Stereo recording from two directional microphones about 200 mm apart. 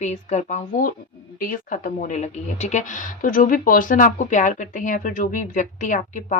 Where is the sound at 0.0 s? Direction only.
35° left (ahead or behind).